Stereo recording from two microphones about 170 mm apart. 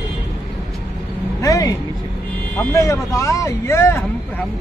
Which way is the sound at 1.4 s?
20° left (ahead or behind).